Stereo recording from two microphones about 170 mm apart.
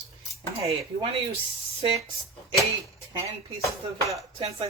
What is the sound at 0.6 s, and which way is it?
Speech, 35° right (ahead or behind).